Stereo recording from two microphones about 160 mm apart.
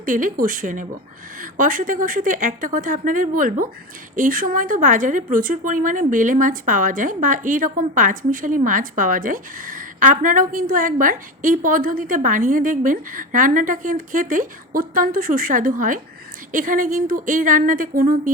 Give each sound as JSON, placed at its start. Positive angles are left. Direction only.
{"t": 0.0, "sound": "a woman's voice", "side_deg": -55}